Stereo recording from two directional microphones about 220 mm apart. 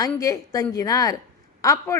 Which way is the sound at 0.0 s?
15° left (ahead or behind).